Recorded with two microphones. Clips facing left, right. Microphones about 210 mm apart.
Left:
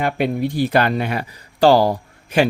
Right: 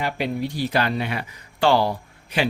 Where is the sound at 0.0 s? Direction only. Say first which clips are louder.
Left 5 dB; 55° left (ahead or behind).